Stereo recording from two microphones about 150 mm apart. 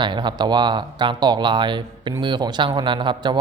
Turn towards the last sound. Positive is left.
turn(degrees=-30)  # may be behind; listen again after turning